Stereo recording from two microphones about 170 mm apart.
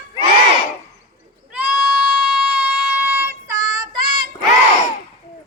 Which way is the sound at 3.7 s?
25° right (ahead or behind).